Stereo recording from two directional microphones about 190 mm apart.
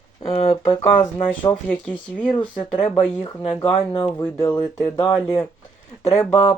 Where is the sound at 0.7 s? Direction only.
20° left (ahead or behind).